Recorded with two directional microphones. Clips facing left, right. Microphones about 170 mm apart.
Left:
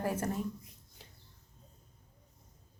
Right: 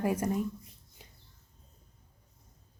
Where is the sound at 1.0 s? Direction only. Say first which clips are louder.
Right 1 dB; 15° right (ahead or behind).